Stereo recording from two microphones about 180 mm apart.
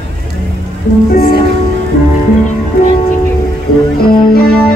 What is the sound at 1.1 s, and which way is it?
Music, 55° left (ahead or behind).